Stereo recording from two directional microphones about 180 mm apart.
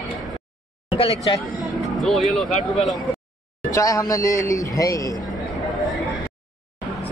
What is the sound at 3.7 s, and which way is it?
A man's voice, 20° left (ahead or behind).